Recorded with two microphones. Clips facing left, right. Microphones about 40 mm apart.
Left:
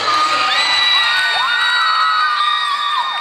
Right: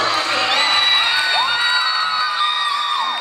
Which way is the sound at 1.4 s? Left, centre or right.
Left.